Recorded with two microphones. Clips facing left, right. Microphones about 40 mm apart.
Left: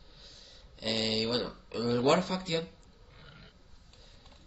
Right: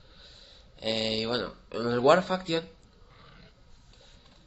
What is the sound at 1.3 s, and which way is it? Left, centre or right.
Speech, centre.